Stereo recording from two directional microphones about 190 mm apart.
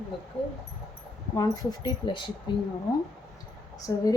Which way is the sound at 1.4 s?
25° left (ahead or behind).